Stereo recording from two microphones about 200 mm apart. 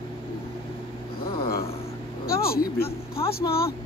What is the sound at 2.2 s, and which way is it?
Vehicle, 50° left (ahead or behind).